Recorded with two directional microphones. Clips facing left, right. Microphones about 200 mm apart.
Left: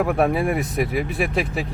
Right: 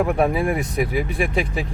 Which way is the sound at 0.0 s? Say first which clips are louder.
Even; centre (ahead or behind).